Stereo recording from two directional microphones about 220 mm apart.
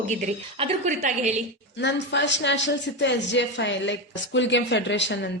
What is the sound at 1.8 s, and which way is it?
A man's voice, 50° left (ahead or behind).